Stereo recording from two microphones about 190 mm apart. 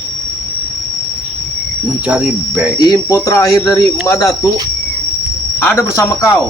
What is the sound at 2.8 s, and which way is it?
Speech, 20° left (ahead or behind).